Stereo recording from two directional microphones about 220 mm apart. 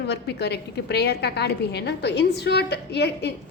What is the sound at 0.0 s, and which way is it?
A woman's voice, 50° left (ahead or behind).